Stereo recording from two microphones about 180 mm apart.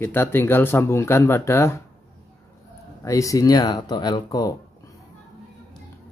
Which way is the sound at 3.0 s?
20° left (ahead or behind).